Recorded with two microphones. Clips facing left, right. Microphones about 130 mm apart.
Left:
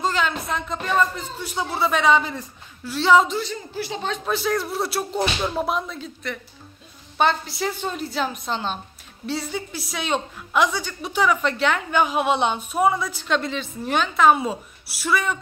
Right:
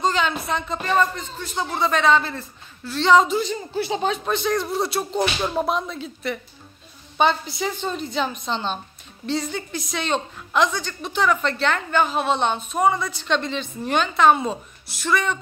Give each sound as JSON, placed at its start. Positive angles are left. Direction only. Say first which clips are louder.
{"t": 0.0, "sound": "a woman's voice", "louder": "right 1 dB", "side_deg": 0}
{"t": 3.3, "sound": "speech", "louder": "right 4 dB", "side_deg": -20}
{"t": 4.3, "sound": "a woman's voice", "louder": "right 1 dB", "side_deg": 5}